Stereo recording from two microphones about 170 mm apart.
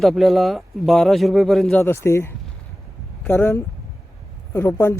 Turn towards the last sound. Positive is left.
turn(degrees=15)  # may be behind; listen again after turning